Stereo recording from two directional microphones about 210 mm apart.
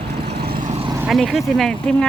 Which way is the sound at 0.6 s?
35° right (ahead or behind).